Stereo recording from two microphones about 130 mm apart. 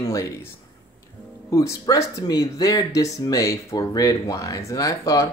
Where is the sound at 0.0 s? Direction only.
25° left (ahead or behind).